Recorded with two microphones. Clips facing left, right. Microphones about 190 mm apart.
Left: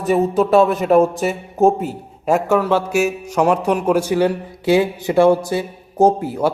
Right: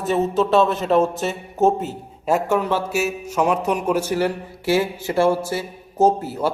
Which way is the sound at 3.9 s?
10° left (ahead or behind).